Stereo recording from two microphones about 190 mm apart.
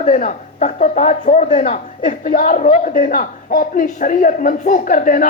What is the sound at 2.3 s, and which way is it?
Speech, 45° left (ahead or behind).